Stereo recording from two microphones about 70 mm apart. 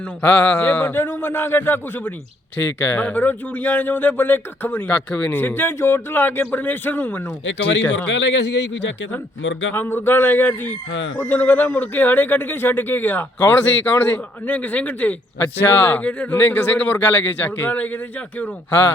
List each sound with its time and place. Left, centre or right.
0.2 s a man's voice: left
9.7 s a man's voice: left